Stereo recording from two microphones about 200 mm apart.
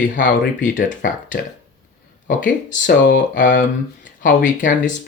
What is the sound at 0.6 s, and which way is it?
Speech, 40° left (ahead or behind).